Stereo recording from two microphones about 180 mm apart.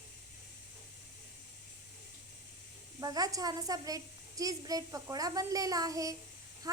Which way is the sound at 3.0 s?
20° right (ahead or behind).